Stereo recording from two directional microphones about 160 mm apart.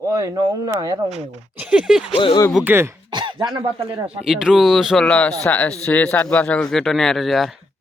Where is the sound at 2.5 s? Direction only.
5° right (ahead or behind).